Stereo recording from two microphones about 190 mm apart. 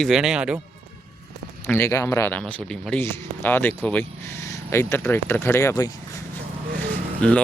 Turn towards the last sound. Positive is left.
turn(degrees=5)  # may be behind; listen again after turning